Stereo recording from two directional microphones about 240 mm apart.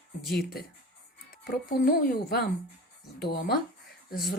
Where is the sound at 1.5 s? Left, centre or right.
Left.